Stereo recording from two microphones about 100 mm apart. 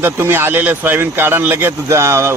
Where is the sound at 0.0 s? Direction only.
25° right (ahead or behind).